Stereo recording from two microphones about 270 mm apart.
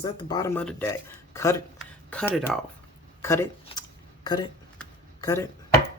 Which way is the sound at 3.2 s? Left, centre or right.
Centre.